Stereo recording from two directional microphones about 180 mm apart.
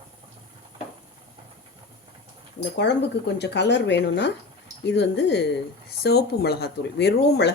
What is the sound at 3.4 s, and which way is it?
Speech, 70° left (ahead or behind).